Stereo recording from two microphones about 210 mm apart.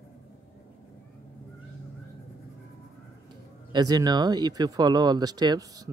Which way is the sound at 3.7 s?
20° right (ahead or behind).